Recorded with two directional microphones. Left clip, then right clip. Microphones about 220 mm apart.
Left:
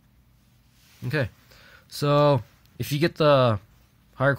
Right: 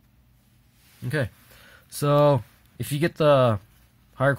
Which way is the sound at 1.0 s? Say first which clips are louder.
Even; centre (ahead or behind).